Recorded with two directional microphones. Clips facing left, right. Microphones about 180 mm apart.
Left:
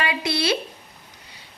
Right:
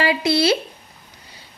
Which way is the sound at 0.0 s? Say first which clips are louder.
Right 6 dB; 30° right (ahead or behind).